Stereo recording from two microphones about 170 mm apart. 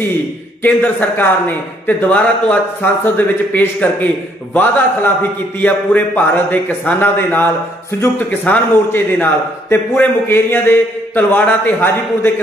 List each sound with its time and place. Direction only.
0.6 s a man's voice: 10° left (ahead or behind)